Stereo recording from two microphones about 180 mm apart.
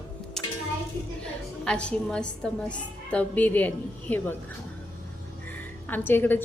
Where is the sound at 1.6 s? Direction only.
5° left (ahead or behind).